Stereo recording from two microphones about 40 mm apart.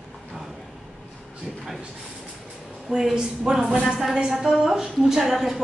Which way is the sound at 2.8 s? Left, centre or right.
Centre.